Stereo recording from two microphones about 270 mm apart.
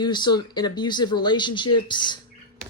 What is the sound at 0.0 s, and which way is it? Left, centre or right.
Speech, centre.